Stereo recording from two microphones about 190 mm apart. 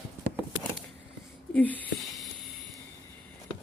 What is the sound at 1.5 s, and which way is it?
Speech, 10° left (ahead or behind).